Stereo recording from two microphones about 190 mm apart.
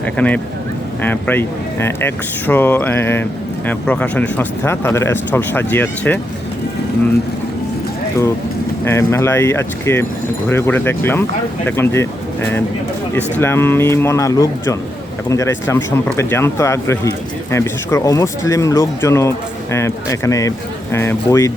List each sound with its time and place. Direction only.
0.0 s speech: 5° left (ahead or behind)
8.8 s speech: 15° left (ahead or behind)